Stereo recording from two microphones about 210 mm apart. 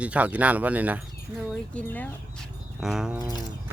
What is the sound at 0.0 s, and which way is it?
Speech, 5° right (ahead or behind).